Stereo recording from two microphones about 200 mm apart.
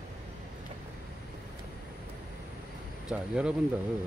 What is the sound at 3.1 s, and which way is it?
Speech, 5° right (ahead or behind).